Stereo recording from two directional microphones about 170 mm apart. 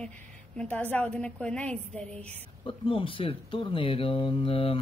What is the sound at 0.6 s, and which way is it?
A woman's voice, 10° left (ahead or behind).